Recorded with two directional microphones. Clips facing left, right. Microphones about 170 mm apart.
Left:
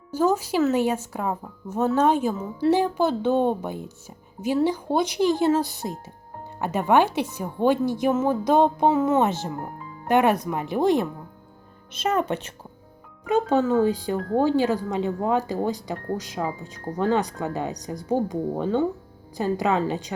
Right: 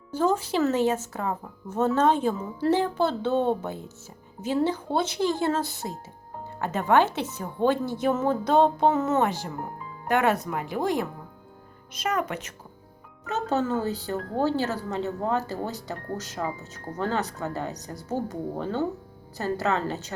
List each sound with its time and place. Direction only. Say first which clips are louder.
0.1 s speech: left 2 dB; 10° left (ahead or behind); by 12.5 s 30° left (ahead or behind)
13.2 s speech: left 6 dB; 10° left (ahead or behind)